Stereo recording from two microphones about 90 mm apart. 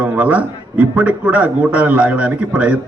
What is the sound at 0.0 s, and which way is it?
A man's voice, 15° right (ahead or behind).